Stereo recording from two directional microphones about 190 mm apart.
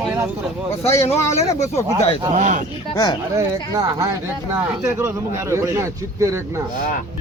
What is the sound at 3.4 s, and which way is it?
A man's voice, 15° right (ahead or behind).